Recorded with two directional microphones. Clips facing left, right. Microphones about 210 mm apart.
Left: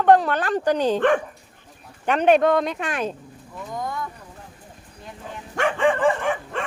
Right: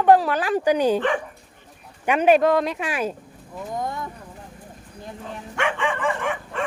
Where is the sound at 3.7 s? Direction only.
25° right (ahead or behind).